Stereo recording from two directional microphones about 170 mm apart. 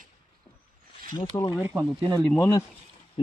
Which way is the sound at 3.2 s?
30° left (ahead or behind).